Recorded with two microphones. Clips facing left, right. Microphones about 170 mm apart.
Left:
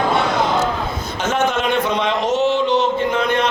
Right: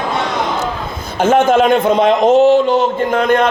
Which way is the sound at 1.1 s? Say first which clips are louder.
Right 9 dB; 50° right (ahead or behind).